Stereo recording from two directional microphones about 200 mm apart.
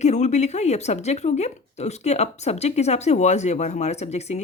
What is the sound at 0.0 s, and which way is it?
Speech, 35° left (ahead or behind).